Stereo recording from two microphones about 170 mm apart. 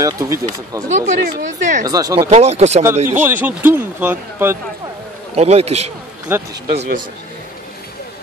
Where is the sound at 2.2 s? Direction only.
40° right (ahead or behind).